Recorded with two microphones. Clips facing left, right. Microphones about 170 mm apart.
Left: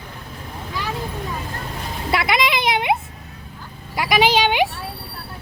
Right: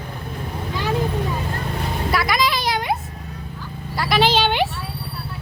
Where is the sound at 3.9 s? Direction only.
15° left (ahead or behind).